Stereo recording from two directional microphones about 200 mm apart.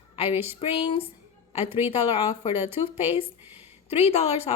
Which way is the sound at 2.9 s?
30° left (ahead or behind).